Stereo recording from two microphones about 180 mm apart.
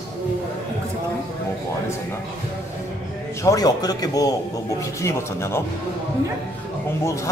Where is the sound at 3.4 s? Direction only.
20° left (ahead or behind).